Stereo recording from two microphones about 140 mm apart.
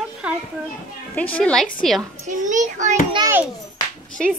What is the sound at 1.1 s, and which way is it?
Speech, 10° left (ahead or behind).